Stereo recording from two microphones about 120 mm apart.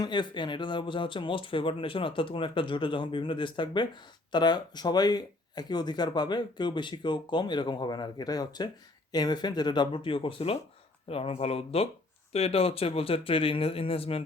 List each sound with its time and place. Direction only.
0.0 s speech: 40° left (ahead or behind)